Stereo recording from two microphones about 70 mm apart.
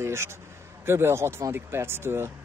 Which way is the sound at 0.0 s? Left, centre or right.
Right.